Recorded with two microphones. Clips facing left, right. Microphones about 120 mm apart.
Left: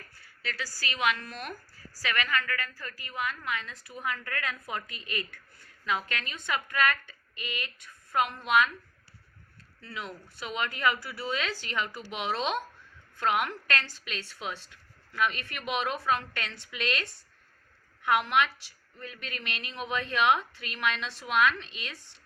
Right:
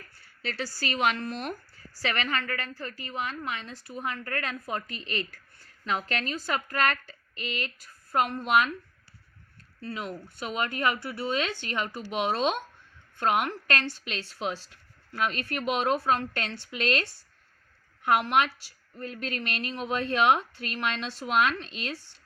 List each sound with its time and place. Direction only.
0.4 s a woman's voice: 25° right (ahead or behind)
5.8 s a woman's voice: 35° right (ahead or behind)
9.8 s a woman's voice: 35° right (ahead or behind)
18.0 s a woman's voice: 40° right (ahead or behind)